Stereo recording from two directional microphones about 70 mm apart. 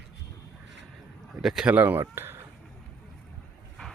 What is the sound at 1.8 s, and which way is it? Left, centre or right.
Speech, right.